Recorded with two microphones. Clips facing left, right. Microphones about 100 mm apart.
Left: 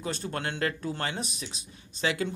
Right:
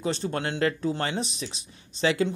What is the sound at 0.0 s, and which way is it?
Speech, 25° right (ahead or behind).